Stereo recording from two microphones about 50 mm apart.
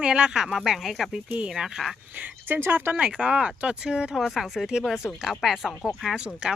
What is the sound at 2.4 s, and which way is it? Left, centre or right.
Speech, right.